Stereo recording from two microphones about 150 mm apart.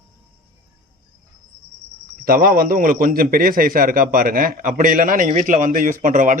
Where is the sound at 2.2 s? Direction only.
70° right (ahead or behind).